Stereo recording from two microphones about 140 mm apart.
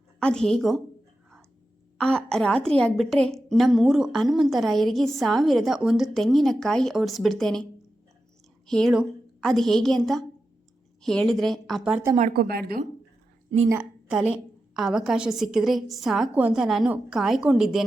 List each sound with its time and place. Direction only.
0.2 s a woman's voice: 5° left (ahead or behind)
2.0 s a woman's voice: 5° left (ahead or behind)
12.3 s a woman's voice: 90° right
13.5 s a woman's voice: 40° right (ahead or behind)
14.1 s a woman's voice: 5° right (ahead or behind)